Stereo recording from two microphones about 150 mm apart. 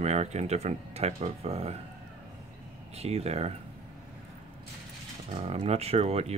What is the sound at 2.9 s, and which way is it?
Speech, 45° right (ahead or behind).